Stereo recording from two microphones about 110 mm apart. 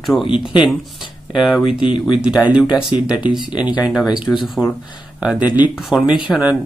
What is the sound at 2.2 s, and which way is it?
Speech, 10° right (ahead or behind).